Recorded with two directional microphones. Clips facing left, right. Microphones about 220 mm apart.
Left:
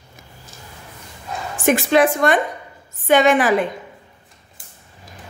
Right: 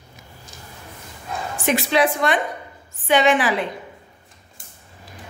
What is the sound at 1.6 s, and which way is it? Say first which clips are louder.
A woman's voice: left 4 dB; 50° left (ahead or behind).